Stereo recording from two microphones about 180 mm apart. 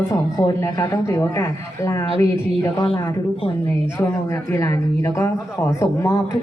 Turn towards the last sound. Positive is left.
turn(degrees=15)  # may be behind; listen again after turning